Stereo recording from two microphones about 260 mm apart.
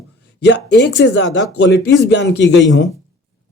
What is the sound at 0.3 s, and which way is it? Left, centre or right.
A man's voice, left.